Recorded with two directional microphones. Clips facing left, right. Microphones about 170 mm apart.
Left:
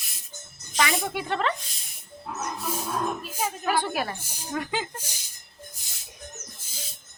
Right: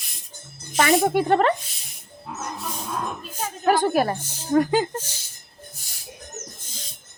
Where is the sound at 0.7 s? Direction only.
50° right (ahead or behind).